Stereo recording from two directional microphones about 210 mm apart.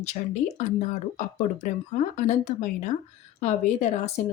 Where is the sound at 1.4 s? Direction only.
35° left (ahead or behind).